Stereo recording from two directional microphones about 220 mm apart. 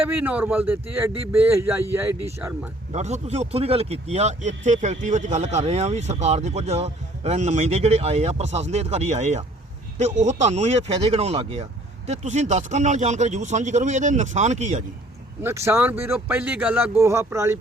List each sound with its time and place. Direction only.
0.0 s speech: 10° right (ahead or behind)
2.9 s speech: 30° right (ahead or behind)
15.4 s speech: 10° right (ahead or behind)